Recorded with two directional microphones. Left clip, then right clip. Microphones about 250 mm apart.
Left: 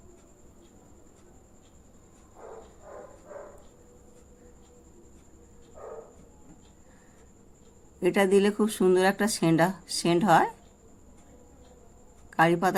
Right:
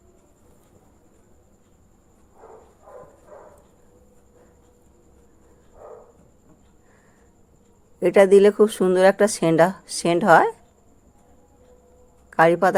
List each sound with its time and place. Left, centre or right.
8.0 s speech: right
12.3 s a man's voice: right